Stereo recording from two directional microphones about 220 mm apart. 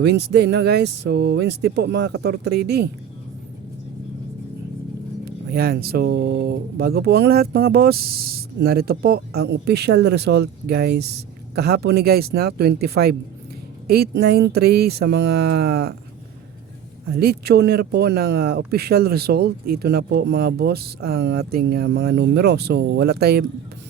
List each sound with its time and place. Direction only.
0.0 s speech: 50° right (ahead or behind)
5.5 s speech: 45° right (ahead or behind)
17.1 s speech: 45° right (ahead or behind)